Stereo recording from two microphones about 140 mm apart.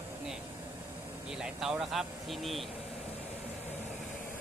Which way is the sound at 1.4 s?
5° right (ahead or behind).